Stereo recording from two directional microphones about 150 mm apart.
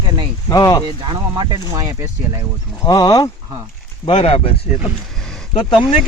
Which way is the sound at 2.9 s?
25° left (ahead or behind).